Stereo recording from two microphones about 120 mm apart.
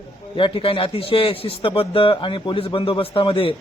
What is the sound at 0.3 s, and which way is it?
Speech, 45° left (ahead or behind).